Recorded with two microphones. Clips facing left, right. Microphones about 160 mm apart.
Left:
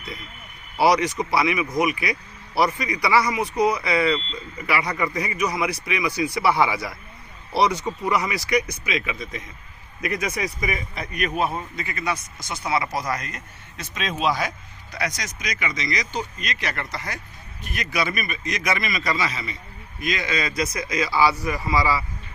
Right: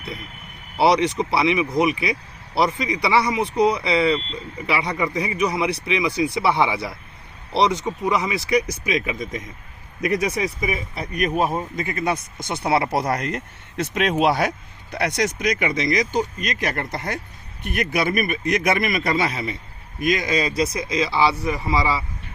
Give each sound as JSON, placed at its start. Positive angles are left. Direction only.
{"t": 0.8, "sound": "speech", "side_deg": -25}
{"t": 12.5, "sound": "speech", "side_deg": -60}
{"t": 20.0, "sound": "speech", "side_deg": -45}